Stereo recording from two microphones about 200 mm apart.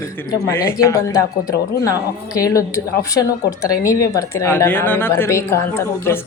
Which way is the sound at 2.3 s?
15° left (ahead or behind).